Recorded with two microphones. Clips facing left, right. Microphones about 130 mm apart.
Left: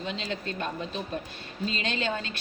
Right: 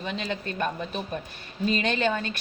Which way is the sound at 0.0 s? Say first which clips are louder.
Right 2 dB; 60° right (ahead or behind).